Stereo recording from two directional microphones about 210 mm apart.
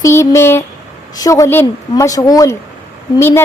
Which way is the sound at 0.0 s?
15° left (ahead or behind).